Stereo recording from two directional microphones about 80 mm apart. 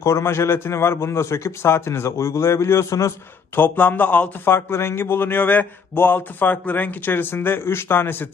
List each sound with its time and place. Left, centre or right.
0.0 s a man's voice: left
3.5 s speech: left